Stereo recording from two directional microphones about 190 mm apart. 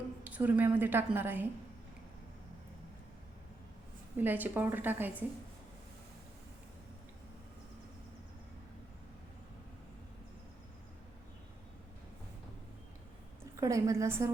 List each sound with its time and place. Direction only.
0.3 s a woman's voice: 10° right (ahead or behind)
4.2 s a woman's voice: 10° right (ahead or behind)
13.6 s a woman's voice: 15° right (ahead or behind)